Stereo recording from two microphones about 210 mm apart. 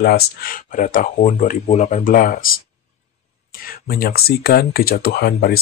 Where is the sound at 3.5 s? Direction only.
45° left (ahead or behind).